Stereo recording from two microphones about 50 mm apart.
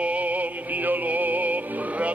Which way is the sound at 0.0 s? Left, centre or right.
Right.